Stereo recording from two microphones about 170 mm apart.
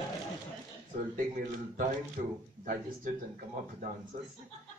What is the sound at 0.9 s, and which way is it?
Speech, 50° right (ahead or behind).